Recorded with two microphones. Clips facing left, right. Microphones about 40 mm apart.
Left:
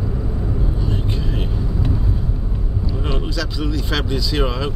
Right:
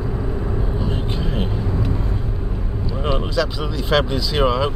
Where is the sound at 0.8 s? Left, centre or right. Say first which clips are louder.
Even; centre.